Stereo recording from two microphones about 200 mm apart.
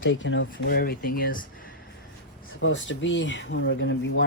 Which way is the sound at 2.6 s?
70° left (ahead or behind).